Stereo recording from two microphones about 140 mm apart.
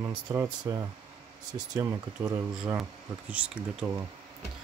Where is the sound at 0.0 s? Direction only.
20° right (ahead or behind).